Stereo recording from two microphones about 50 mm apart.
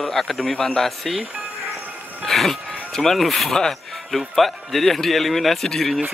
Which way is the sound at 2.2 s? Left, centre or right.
Centre.